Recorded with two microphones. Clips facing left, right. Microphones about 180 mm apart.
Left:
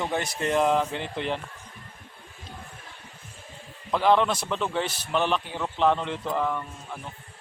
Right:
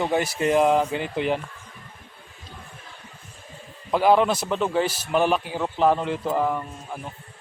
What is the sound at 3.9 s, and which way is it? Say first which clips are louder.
Speech: right 3 dB; 10° right (ahead or behind).